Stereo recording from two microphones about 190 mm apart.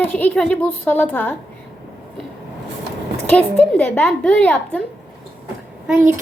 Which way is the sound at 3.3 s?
5° left (ahead or behind).